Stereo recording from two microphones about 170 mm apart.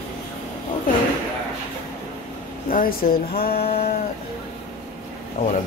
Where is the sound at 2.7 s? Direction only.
55° left (ahead or behind).